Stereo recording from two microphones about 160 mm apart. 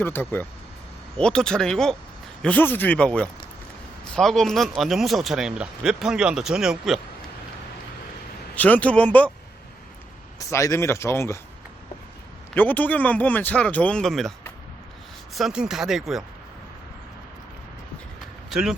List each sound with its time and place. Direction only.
0.0 s speech: 15° left (ahead or behind); by 7.0 s centre (ahead or behind)
8.5 s speech: 10° left (ahead or behind)
10.3 s speech: 20° left (ahead or behind)
12.5 s speech: 10° left (ahead or behind)
15.4 s speech: 5° right (ahead or behind)